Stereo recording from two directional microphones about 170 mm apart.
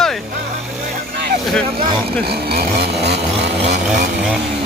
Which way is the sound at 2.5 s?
75° right (ahead or behind).